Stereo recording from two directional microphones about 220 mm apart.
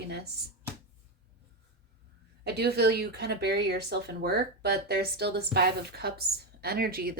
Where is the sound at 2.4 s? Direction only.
45° right (ahead or behind).